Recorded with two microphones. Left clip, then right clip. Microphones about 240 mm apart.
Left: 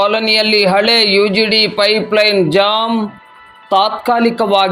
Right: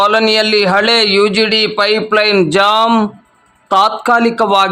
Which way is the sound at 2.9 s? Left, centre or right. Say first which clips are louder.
Right 6 dB; centre.